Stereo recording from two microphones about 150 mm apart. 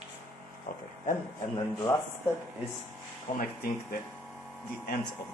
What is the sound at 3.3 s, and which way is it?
Speech, 45° left (ahead or behind).